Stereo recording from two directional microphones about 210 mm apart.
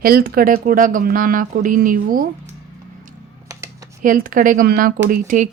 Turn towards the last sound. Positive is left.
turn(degrees=-40)  # may be behind; listen again after turning